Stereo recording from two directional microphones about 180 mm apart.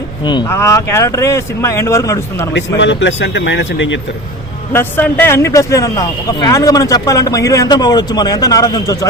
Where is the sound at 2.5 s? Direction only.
80° left.